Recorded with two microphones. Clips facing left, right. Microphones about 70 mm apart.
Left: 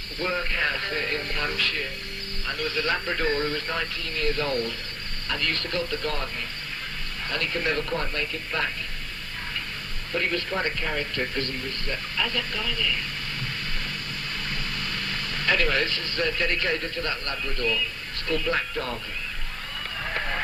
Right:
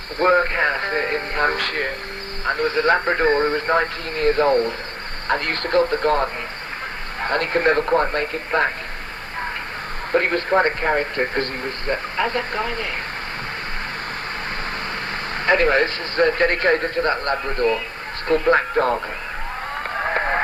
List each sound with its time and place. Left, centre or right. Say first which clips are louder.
0.2 s a man's voice: right 10 dB; right
10.1 s a man's voice: right 9 dB; right
15.1 s a man's voice: right 7 dB; right
19.9 s a sound: right 9 dB; right